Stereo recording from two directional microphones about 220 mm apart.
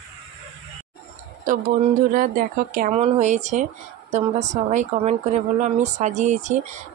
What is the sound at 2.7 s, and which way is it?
Speech, 35° right (ahead or behind).